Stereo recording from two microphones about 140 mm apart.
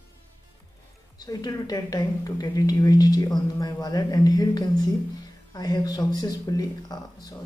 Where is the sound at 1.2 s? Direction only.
25° left (ahead or behind).